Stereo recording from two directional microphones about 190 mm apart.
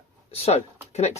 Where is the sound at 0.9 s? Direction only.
35° left (ahead or behind).